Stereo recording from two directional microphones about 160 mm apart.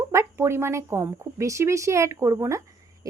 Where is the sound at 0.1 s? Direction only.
15° right (ahead or behind).